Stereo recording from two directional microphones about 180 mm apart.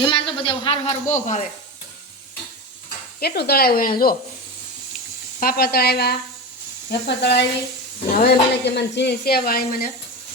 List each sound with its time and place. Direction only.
0.0 s a man's voice: 25° left (ahead or behind); by 1.5 s 45° left (ahead or behind)
3.2 s speech: 60° left (ahead or behind)
5.4 s speech: 55° left (ahead or behind)